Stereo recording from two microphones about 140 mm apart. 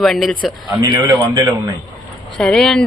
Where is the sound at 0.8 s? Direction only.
30° right (ahead or behind).